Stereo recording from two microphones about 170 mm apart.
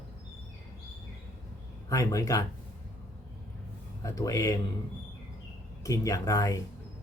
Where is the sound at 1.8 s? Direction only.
20° left (ahead or behind).